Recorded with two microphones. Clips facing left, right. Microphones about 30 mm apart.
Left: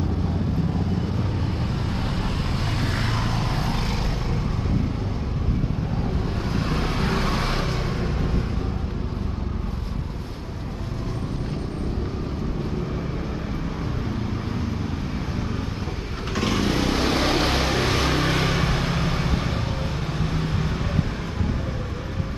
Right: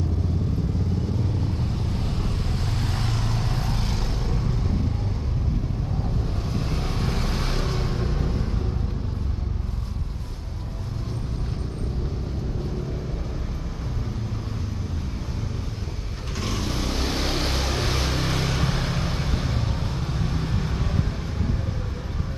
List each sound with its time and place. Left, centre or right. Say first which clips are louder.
1.6 s vehicle: left 2 dB; left
6.5 s vehicle: left 5 dB; left
16.3 s vehicle: left 6 dB; left
18.7 s vehicle: left 3 dB; left